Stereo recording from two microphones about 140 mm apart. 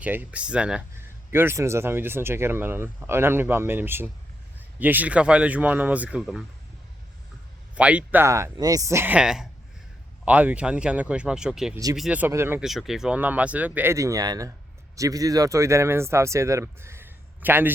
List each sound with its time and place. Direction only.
0.0 s speech: 10° right (ahead or behind)
7.8 s speech: 10° right (ahead or behind)
12.3 s speech: 20° right (ahead or behind)
12.5 s speech: centre (ahead or behind)